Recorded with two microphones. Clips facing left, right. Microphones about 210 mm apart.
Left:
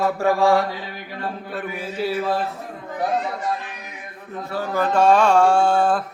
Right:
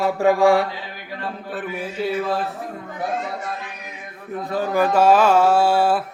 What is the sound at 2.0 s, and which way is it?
Speech, 5° left (ahead or behind).